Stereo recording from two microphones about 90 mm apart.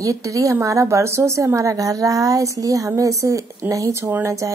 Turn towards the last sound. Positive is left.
turn(degrees=-35)  # may be behind; listen again after turning